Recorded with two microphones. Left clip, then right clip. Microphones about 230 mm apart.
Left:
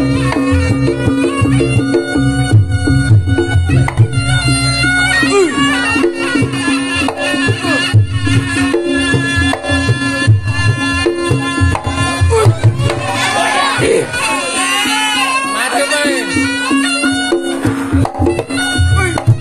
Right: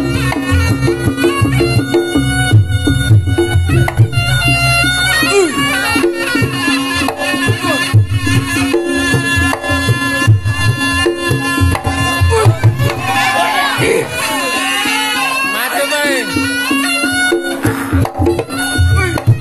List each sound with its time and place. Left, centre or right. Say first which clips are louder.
0.0 s music: left 2 dB; right
4.5 s bagpipes: right 2 dB; right
8.3 s music: even; right
13.7 s music: left 1 dB; centre
14.7 s music: left 1 dB; left
16.6 s bagpipes: even; centre